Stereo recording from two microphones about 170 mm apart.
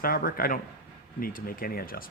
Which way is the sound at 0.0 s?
60° left (ahead or behind).